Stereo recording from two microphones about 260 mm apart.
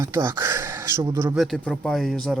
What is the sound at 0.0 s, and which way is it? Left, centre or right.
Speech, centre.